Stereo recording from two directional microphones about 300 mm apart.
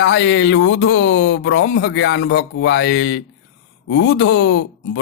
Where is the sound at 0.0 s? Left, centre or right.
Left.